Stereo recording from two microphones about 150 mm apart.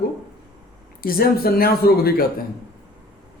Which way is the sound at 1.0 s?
80° left.